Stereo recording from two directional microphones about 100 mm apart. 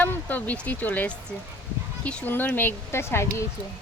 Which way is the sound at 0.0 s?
20° left (ahead or behind).